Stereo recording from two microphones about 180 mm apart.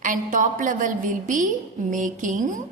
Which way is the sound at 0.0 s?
45° right (ahead or behind).